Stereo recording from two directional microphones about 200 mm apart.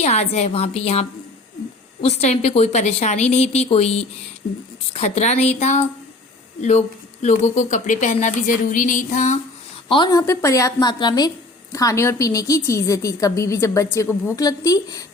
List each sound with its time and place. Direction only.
0.0 s speech: 30° left (ahead or behind)
9.9 s a woman's voice: 20° left (ahead or behind)